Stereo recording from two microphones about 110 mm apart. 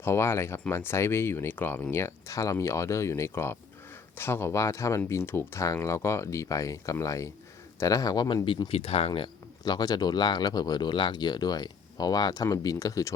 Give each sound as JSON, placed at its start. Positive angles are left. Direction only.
{"t": 0.0, "sound": "speech", "side_deg": 25}
{"t": 9.6, "sound": "speech", "side_deg": 40}